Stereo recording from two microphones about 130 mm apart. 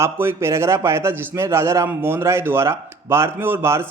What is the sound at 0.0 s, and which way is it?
A man's voice, 20° right (ahead or behind).